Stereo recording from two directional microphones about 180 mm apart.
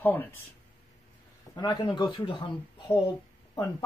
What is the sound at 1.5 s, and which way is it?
Speech, 25° left (ahead or behind).